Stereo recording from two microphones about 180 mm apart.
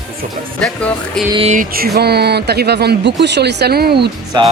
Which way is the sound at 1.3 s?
30° right (ahead or behind).